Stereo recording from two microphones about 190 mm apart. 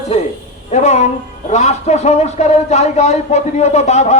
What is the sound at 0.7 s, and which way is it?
Speech, 35° left (ahead or behind).